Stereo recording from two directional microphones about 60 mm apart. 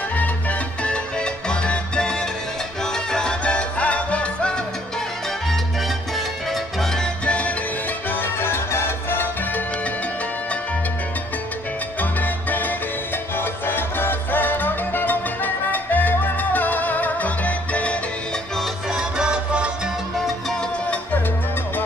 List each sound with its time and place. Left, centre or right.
0.2 s music: left
3.1 s salsa music: centre
6.1 s music: centre
7.2 s music: left
8.1 s music: left
12.0 s music: left
18.9 s music: centre